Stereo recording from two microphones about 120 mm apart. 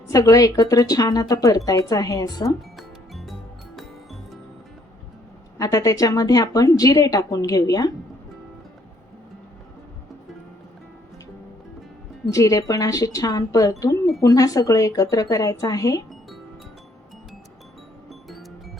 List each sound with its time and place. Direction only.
0.1 s speech: 30° left (ahead or behind)
2.7 s music: centre (ahead or behind)
5.5 s a woman's voice: 30° left (ahead or behind)
12.3 s speech: 30° left (ahead or behind)